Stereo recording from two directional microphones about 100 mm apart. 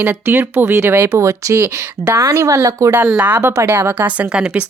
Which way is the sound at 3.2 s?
15° right (ahead or behind).